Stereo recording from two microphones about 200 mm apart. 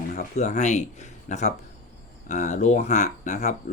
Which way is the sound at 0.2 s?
35° left (ahead or behind).